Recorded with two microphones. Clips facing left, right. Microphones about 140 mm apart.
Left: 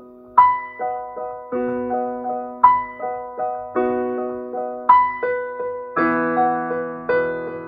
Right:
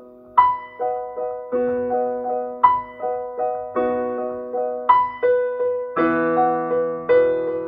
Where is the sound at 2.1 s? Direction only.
10° right (ahead or behind).